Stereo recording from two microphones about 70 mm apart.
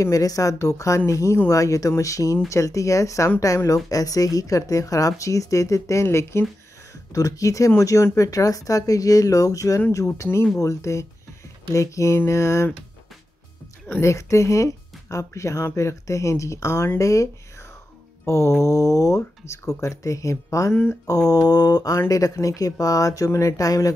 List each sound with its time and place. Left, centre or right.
0.0 s speech: left
7.2 s speech: left
9.8 s speech: left
14.0 s speech: left
18.2 s music: left
18.6 s speech: left
21.3 s mantra: left
22.3 s speech: left